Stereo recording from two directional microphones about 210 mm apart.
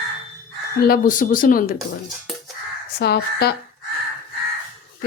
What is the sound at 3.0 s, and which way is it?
Speech, 50° left (ahead or behind).